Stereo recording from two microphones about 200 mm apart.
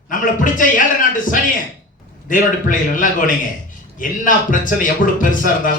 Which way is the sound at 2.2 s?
40° left (ahead or behind).